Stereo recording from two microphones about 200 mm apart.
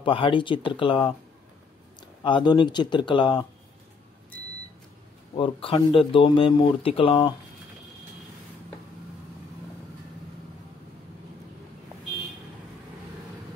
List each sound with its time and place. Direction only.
0.0 s speech: 25° left (ahead or behind)
5.3 s speech: 30° left (ahead or behind)